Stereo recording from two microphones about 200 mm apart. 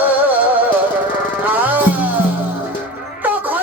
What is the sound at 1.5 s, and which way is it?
Music, 10° right (ahead or behind).